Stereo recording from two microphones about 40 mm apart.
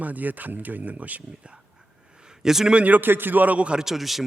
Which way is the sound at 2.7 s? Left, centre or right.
Right.